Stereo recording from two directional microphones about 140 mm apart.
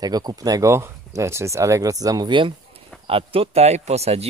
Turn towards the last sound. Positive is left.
turn(degrees=-50)  # may be behind; listen again after turning